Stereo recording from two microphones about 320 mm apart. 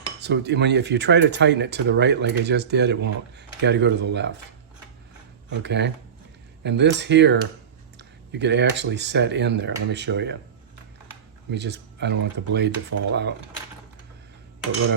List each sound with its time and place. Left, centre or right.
0.2 s speech: right
5.5 s speech: right
11.5 s speech: right
12.9 s speech: right